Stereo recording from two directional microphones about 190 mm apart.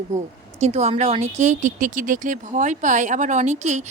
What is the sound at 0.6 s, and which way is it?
Speech, 35° right (ahead or behind).